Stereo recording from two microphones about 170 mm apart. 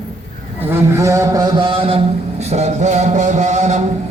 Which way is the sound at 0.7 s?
15° right (ahead or behind).